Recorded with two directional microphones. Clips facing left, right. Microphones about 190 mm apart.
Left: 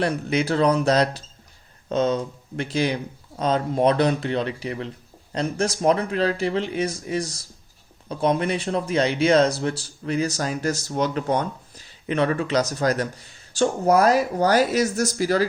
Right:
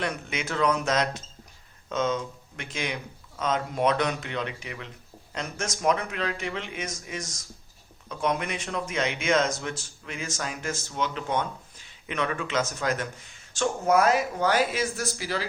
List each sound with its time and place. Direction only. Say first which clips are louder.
0.0 s speech: left 9 dB; 35° left (ahead or behind)